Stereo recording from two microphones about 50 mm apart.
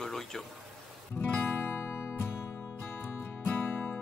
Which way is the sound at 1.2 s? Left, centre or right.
Left.